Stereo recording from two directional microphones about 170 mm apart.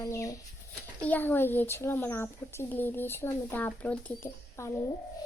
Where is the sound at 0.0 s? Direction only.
20° left (ahead or behind).